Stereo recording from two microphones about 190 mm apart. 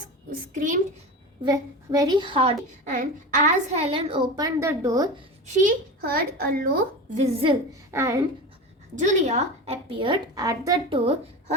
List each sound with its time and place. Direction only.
1.5 s a woman's voice: 20° right (ahead or behind)
2.8 s a woman's voice: 45° right (ahead or behind); by 5.1 s 20° right (ahead or behind)
5.6 s a woman's voice: 50° right (ahead or behind)
7.4 s a child's voice: 15° right (ahead or behind)
9.0 s a woman's voice: 40° right (ahead or behind); by 10.8 s 15° right (ahead or behind)
10.8 s a woman's voice: 30° right (ahead or behind)